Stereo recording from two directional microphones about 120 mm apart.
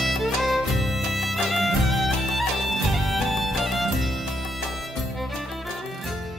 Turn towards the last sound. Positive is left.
turn(degrees=0)  # may be behind; listen again after turning